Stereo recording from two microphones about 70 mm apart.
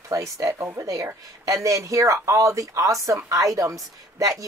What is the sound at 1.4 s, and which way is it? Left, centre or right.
A woman's voice, right.